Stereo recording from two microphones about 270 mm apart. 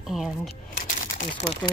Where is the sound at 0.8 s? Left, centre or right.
Left.